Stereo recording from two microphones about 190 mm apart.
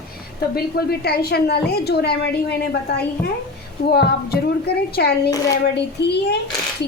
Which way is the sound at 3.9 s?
55° left (ahead or behind).